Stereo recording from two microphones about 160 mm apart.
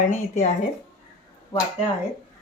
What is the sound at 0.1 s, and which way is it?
Speech, 50° left (ahead or behind).